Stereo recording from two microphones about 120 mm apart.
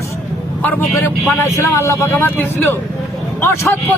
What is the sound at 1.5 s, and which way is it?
Speech, 25° left (ahead or behind).